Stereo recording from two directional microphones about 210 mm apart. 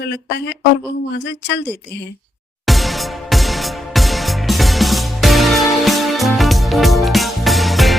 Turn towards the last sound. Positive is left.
turn(degrees=0)  # may be behind; listen again after turning